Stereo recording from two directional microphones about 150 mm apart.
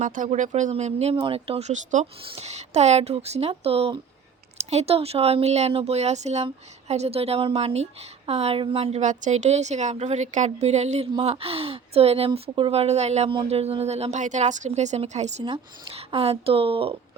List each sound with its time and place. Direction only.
0.0 s a woman's voice: 60° right (ahead or behind); by 17.0 s 40° right (ahead or behind)